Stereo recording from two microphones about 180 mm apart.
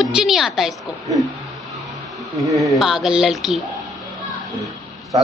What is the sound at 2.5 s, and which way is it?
Speech, 15° right (ahead or behind).